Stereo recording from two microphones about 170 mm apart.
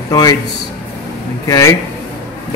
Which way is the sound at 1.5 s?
15° left (ahead or behind).